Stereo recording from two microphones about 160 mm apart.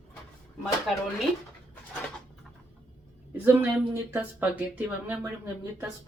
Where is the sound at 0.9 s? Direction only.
Centre (ahead or behind).